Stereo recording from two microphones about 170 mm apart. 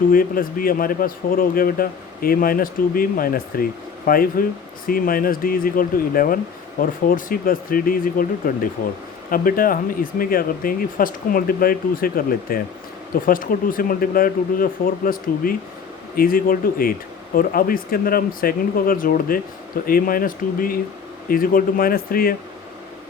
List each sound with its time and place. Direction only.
0.1 s a man's voice: 55° left (ahead or behind)